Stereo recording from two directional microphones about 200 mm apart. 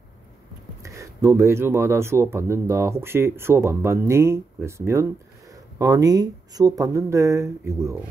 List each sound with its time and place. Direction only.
0.8 s speech: 15° right (ahead or behind)